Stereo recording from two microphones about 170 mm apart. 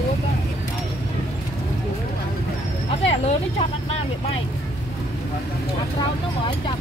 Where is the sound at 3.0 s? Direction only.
35° left (ahead or behind).